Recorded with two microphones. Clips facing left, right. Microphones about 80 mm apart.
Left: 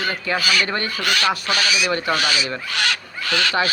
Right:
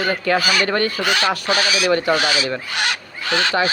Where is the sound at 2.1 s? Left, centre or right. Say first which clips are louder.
Right 3 dB; right.